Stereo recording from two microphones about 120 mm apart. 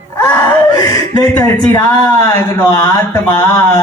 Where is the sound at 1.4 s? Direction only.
30° left (ahead or behind).